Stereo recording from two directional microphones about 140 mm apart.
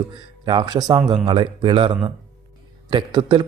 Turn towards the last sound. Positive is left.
turn(degrees=-35)  # may be behind; listen again after turning